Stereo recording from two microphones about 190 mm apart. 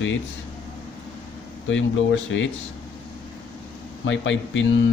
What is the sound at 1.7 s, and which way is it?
Speech, 80° left.